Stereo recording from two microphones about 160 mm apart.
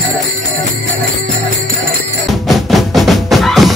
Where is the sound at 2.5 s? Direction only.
Centre (ahead or behind).